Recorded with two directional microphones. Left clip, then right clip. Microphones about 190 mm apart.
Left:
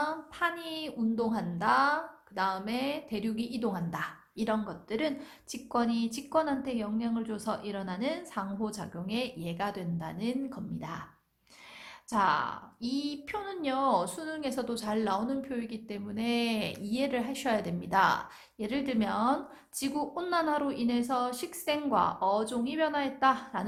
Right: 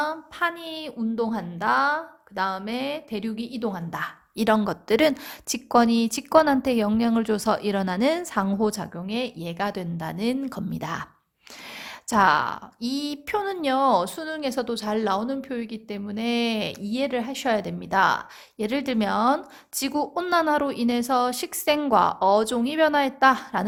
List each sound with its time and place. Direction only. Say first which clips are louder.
0.0 s a woman's voice: right 6 dB; 30° right (ahead or behind)
4.4 s a woman's voice: right 11 dB; 45° right (ahead or behind)
12.1 s a woman's voice: right 8 dB; 40° right (ahead or behind)